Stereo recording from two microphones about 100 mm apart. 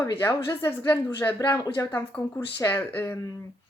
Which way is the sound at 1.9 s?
20° left (ahead or behind).